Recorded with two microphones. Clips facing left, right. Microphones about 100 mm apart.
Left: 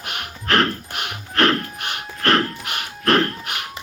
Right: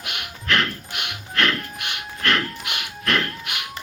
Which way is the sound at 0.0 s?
40° left (ahead or behind).